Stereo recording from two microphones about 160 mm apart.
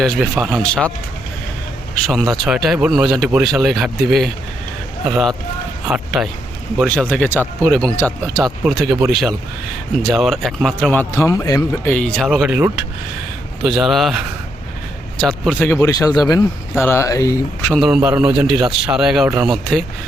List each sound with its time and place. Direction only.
0.0 s speech: centre (ahead or behind)
2.0 s speech: centre (ahead or behind)
8.6 s speech: 5° right (ahead or behind)
11.1 s speech: 20° left (ahead or behind)
11.9 s speech: 5° left (ahead or behind)
13.7 s speech: centre (ahead or behind)
15.2 s speech: 5° left (ahead or behind)
17.7 s speech: 5° right (ahead or behind)